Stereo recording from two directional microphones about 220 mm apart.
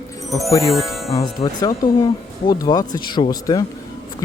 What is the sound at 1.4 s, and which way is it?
Speech, 25° left (ahead or behind).